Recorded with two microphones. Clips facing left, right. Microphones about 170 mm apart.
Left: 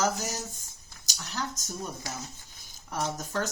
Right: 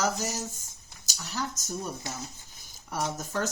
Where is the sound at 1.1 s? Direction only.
10° right (ahead or behind).